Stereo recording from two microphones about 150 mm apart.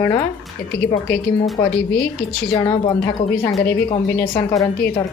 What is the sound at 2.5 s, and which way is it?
Speech, 35° left (ahead or behind).